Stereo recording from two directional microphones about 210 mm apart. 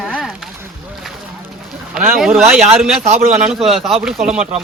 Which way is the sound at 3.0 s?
30° right (ahead or behind).